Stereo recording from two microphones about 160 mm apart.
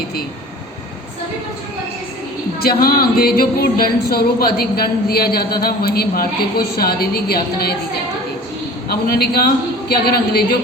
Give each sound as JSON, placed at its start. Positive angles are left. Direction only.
{"t": 2.6, "sound": "speech", "side_deg": 70}
{"t": 8.9, "sound": "a man's voice", "side_deg": 80}